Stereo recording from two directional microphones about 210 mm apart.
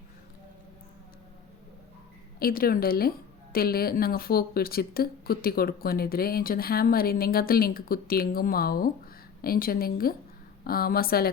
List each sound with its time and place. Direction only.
2.4 s speech: 45° left (ahead or behind)